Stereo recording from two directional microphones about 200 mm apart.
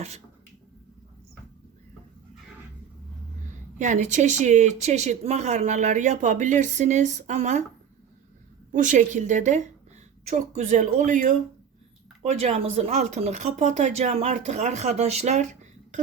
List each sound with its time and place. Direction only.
3.8 s speech: 40° right (ahead or behind)
8.7 s speech: 40° right (ahead or behind)